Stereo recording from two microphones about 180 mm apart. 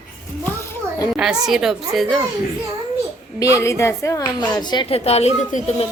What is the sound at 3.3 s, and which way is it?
A woman's voice, 15° left (ahead or behind).